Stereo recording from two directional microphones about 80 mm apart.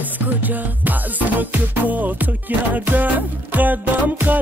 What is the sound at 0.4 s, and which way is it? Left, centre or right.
Music, right.